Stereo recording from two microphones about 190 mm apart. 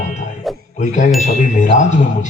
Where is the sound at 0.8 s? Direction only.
40° left (ahead or behind).